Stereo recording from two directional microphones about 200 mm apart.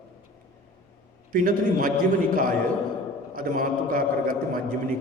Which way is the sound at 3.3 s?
45° right (ahead or behind).